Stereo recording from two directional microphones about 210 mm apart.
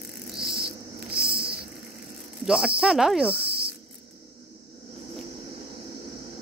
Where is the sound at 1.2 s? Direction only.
50° right (ahead or behind).